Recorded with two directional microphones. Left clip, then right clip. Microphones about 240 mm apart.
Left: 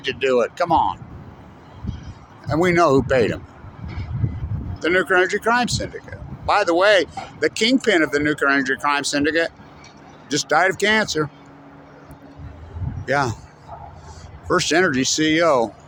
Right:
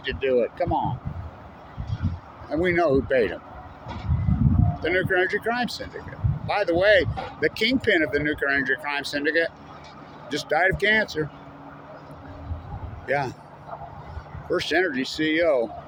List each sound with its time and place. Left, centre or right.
0.0 s speech: left
2.5 s speech: left
4.8 s speech: left
13.1 s a man's voice: left
14.5 s speech: left